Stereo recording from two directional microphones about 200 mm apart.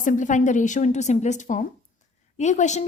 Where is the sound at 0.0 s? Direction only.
40° left (ahead or behind).